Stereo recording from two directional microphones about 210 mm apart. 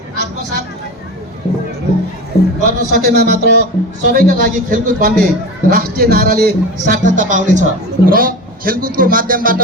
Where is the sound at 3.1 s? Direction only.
50° right (ahead or behind).